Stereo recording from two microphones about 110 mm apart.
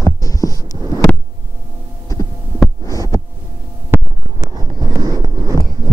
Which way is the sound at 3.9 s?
20° right (ahead or behind).